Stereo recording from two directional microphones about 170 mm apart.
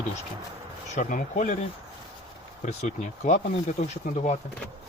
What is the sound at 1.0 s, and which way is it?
Speech, 50° left (ahead or behind).